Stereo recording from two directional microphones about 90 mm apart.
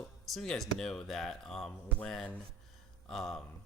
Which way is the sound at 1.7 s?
10° left (ahead or behind).